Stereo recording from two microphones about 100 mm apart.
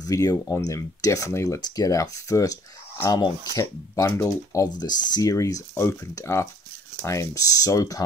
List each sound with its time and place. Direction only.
0.0 s speech: 35° left (ahead or behind)